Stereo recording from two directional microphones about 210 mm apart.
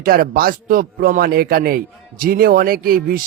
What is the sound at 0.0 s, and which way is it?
Speech, 45° right (ahead or behind).